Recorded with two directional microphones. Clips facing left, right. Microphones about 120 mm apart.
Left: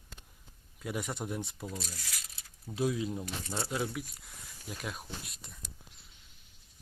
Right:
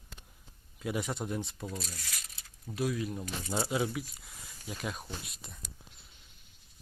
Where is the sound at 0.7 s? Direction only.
Centre (ahead or behind).